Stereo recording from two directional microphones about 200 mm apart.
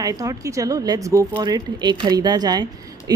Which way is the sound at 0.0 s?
15° right (ahead or behind).